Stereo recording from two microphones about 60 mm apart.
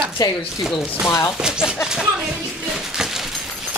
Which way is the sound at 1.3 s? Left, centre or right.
Centre.